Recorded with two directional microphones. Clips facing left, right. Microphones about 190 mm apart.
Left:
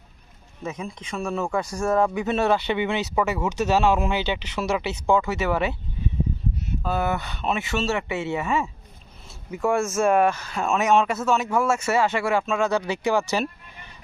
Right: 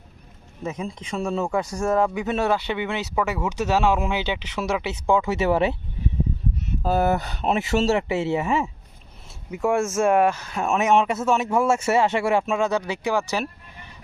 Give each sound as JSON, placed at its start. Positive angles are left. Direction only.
{"t": 0.6, "sound": "speech", "side_deg": -30}
{"t": 5.3, "sound": "speech", "side_deg": -30}
{"t": 6.8, "sound": "speech", "side_deg": -40}
{"t": 9.5, "sound": "speech", "side_deg": -20}
{"t": 10.8, "sound": "speech", "side_deg": -25}
{"t": 12.5, "sound": "speech", "side_deg": -15}